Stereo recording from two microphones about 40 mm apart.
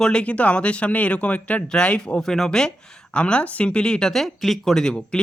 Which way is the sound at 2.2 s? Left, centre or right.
Centre.